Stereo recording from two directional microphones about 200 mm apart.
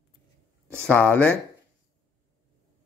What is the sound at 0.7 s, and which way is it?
Speech, 5° left (ahead or behind).